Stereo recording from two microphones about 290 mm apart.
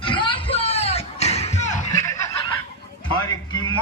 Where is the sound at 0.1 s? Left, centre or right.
Centre.